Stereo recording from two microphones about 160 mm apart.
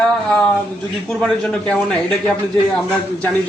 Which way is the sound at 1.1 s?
Centre (ahead or behind).